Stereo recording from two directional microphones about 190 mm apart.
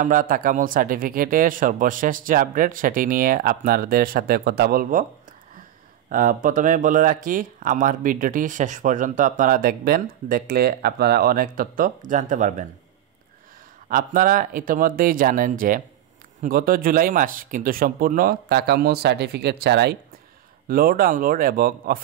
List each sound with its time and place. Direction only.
0.0 s speech: 45° right (ahead or behind)
6.0 s speech: 45° right (ahead or behind)
13.8 s speech: 45° right (ahead or behind); by 20.0 s 60° right (ahead or behind)
20.6 s speech: 50° right (ahead or behind)